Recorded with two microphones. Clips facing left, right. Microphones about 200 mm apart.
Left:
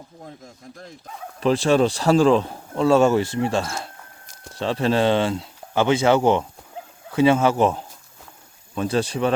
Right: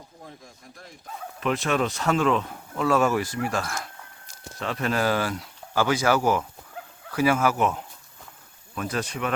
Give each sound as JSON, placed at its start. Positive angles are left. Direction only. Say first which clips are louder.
{"t": 1.4, "sound": "speech", "louder": "left 7 dB", "side_deg": 30}